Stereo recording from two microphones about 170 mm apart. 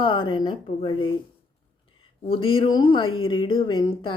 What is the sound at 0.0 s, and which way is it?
Speech, 30° left (ahead or behind).